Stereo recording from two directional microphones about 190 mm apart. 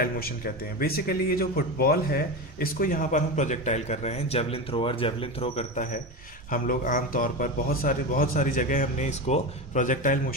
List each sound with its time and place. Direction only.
0.0 s a man's voice: 50° left (ahead or behind)